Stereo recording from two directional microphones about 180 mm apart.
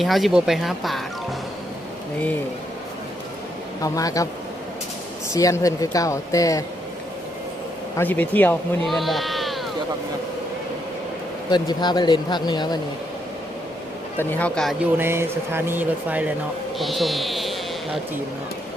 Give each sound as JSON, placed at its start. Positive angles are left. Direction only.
{"t": 0.0, "sound": "speech", "side_deg": 0}
{"t": 3.8, "sound": "speech", "side_deg": 20}
{"t": 5.3, "sound": "speech", "side_deg": 20}
{"t": 7.9, "sound": "speech", "side_deg": 10}
{"t": 11.5, "sound": "speech", "side_deg": 25}
{"t": 14.2, "sound": "speech", "side_deg": 10}
{"t": 14.9, "sound": "speech", "side_deg": -15}